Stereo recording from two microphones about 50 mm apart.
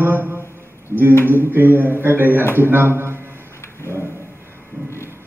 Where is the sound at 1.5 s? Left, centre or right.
Right.